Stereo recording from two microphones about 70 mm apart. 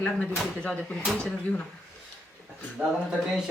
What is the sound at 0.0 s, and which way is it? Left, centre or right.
Speech, centre.